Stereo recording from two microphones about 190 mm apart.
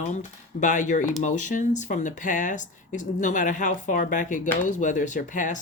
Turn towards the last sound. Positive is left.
turn(degrees=45)  # may be behind; listen again after turning